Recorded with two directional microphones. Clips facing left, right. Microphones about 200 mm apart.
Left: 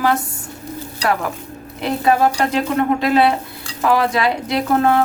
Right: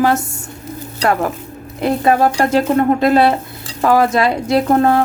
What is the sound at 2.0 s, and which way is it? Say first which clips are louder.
A woman's voice: right 1 dB; 45° right (ahead or behind).